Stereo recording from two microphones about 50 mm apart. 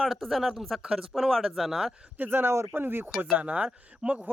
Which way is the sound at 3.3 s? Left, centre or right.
Right.